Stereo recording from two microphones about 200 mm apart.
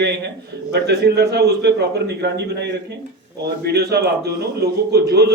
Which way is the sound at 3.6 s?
50° right (ahead or behind).